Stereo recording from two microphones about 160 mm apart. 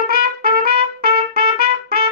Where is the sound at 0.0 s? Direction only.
70° right (ahead or behind).